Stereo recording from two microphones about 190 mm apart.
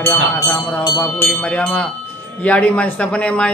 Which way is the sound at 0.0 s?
10° left (ahead or behind).